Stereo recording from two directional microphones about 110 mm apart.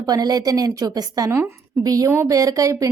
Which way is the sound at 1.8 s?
30° right (ahead or behind).